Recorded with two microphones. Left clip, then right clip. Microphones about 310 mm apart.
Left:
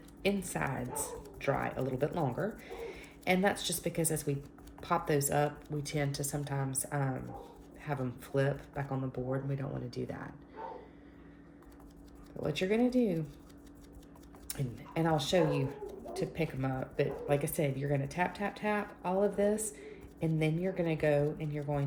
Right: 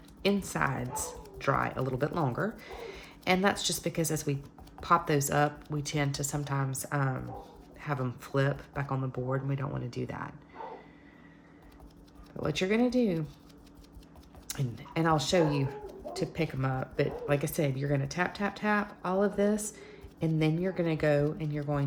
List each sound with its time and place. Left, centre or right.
0.2 s speech: right
12.4 s speech: right
14.5 s speech: right